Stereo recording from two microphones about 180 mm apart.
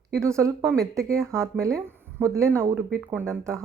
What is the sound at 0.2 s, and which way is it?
Speech, 15° right (ahead or behind).